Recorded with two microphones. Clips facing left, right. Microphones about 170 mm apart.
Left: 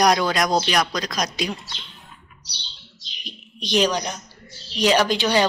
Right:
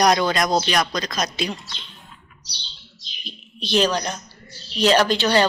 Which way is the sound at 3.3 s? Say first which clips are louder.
Right 1 dB; 15° left (ahead or behind).